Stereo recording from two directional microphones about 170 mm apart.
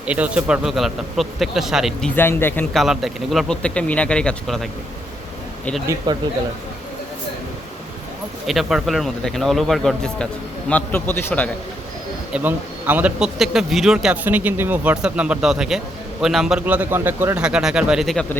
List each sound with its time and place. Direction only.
0.0 s speech: 10° right (ahead or behind); by 2.6 s 10° left (ahead or behind)
2.7 s speech: centre (ahead or behind)
6.1 s speech: 25° right (ahead or behind)
8.4 s a man's voice: centre (ahead or behind)
12.3 s speech: 10° right (ahead or behind)